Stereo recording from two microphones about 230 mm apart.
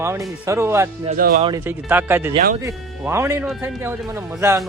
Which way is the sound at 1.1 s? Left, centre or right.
Right.